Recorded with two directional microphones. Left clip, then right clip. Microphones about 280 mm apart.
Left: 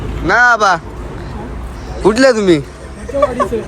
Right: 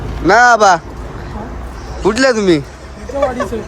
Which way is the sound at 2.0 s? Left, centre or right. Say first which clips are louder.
Left 2 dB; centre.